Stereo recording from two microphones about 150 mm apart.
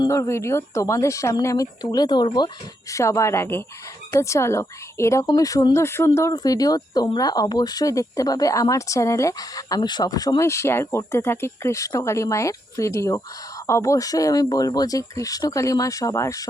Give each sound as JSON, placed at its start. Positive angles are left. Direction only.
{"t": 0.0, "sound": "speech", "side_deg": 20}